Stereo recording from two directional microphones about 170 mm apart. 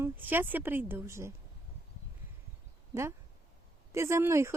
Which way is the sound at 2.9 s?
15° right (ahead or behind).